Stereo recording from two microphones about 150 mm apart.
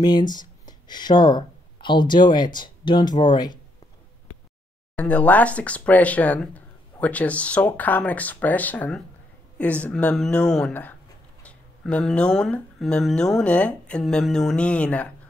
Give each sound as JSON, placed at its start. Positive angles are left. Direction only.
{"t": 0.0, "sound": "speech", "side_deg": 30}
{"t": 4.9, "sound": "speech", "side_deg": 10}